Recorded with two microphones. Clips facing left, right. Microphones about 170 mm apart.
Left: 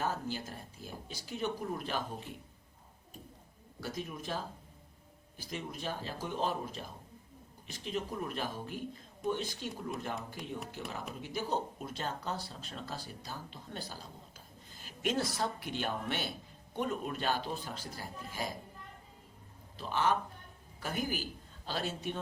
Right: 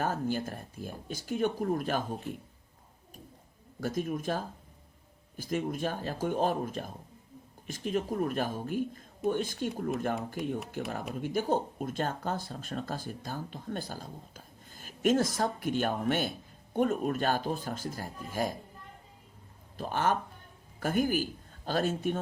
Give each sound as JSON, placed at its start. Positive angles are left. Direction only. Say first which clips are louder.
{"t": 0.0, "sound": "speech", "louder": "right 5 dB", "side_deg": -50}
{"t": 3.8, "sound": "speech", "louder": "right 8 dB", "side_deg": -50}
{"t": 19.7, "sound": "speech", "louder": "right 2 dB", "side_deg": -50}